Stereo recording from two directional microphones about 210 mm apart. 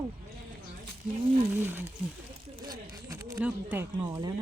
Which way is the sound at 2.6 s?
15° right (ahead or behind).